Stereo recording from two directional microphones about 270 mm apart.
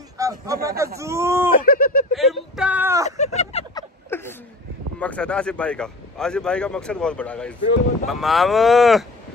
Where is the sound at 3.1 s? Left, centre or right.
Left.